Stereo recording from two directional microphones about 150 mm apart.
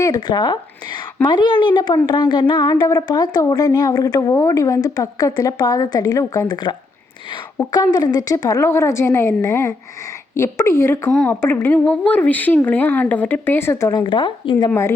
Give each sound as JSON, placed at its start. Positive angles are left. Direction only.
{"t": 0.0, "sound": "a woman's voice", "side_deg": 25}
{"t": 14.0, "sound": "speech", "side_deg": 35}
{"t": 14.7, "sound": "speech", "side_deg": 15}